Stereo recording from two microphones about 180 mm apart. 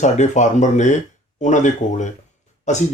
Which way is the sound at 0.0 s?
40° left (ahead or behind).